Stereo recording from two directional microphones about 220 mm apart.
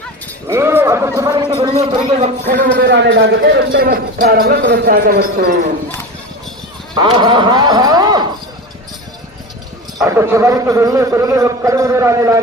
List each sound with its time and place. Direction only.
0.4 s a man's voice: 10° right (ahead or behind)
2.6 s a man's voice: 50° right (ahead or behind)
6.9 s speech: 20° right (ahead or behind)
10.0 s a man's voice: 10° right (ahead or behind)